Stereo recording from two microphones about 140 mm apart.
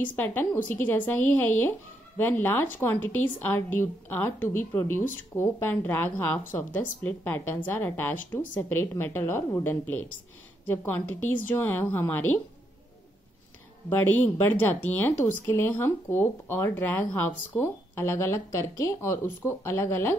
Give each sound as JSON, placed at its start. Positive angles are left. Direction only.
{"t": 0.0, "sound": "speech", "side_deg": 15}
{"t": 13.8, "sound": "speech", "side_deg": 15}